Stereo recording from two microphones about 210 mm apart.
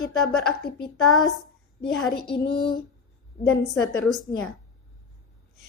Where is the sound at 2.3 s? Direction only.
20° left (ahead or behind).